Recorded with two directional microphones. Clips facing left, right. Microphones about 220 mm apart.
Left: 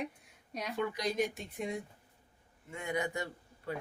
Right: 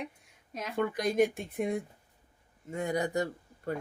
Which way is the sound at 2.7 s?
40° right (ahead or behind).